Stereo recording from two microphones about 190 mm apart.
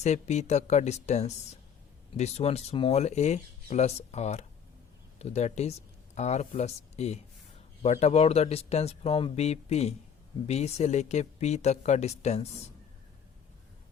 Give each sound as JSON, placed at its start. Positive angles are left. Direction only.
{"t": 0.0, "sound": "speech", "side_deg": 35}